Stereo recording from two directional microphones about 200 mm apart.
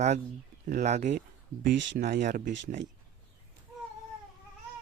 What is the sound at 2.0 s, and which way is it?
Speech, 40° right (ahead or behind).